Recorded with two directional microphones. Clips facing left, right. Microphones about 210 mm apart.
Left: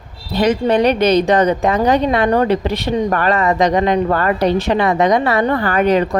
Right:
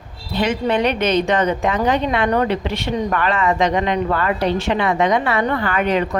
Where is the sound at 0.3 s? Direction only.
40° left (ahead or behind).